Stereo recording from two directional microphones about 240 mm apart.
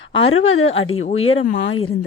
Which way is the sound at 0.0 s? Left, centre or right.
Left.